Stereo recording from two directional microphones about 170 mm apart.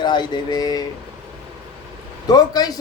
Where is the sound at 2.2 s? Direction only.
25° left (ahead or behind).